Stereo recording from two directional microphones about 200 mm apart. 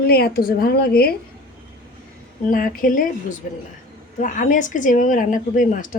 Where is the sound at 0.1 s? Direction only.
50° left (ahead or behind).